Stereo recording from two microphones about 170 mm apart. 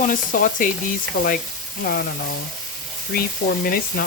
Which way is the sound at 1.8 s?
60° left (ahead or behind).